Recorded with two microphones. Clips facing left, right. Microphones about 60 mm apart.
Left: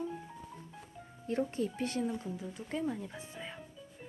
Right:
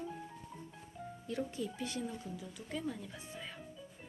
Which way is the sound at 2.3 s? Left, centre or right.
Left.